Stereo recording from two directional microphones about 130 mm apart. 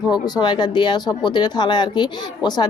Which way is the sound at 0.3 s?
35° left (ahead or behind).